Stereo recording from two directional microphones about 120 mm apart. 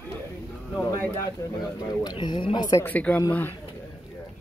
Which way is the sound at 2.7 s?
15° left (ahead or behind).